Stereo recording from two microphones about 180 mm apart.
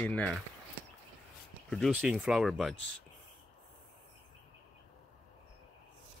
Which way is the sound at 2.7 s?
90° right.